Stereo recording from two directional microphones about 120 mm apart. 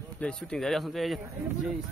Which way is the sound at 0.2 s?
5° left (ahead or behind).